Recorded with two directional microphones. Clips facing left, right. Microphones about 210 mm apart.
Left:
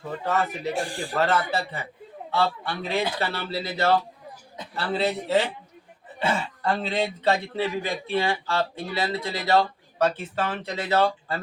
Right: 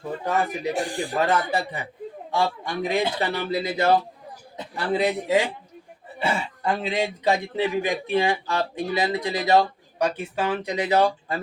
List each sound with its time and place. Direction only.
0.3 s a man's voice: 15° right (ahead or behind)